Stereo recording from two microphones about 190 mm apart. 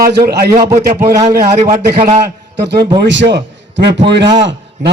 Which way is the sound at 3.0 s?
70° right (ahead or behind).